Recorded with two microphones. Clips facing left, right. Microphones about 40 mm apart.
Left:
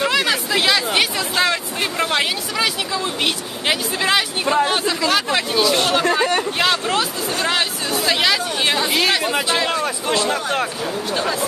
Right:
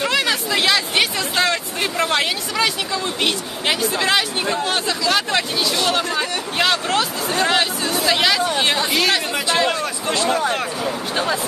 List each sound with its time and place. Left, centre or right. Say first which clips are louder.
0.0 s chatter: left 1 dB; centre
4.6 s speech: left 1 dB; centre